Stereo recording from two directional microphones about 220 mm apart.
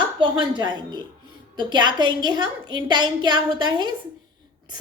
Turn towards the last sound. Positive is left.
turn(degrees=-20)  # may be behind; listen again after turning